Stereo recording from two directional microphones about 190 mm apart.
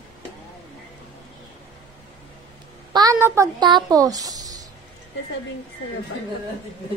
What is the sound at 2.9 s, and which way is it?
A child's voice, 15° right (ahead or behind).